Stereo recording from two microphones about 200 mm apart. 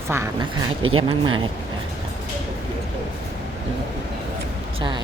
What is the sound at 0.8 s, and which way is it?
Speech, 90° right.